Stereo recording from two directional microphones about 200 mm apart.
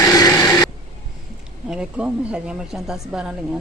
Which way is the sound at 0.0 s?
20° left (ahead or behind).